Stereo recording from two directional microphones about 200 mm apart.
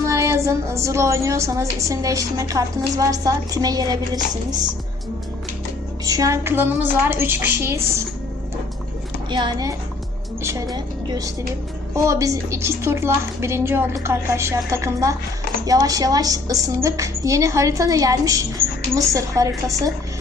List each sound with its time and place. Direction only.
0.0 s a woman's voice: 15° right (ahead or behind)
6.1 s a woman's voice: 15° right (ahead or behind)
9.3 s a woman's voice: 20° right (ahead or behind)